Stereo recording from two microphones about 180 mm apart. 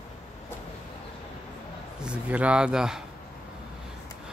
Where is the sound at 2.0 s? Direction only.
5° right (ahead or behind).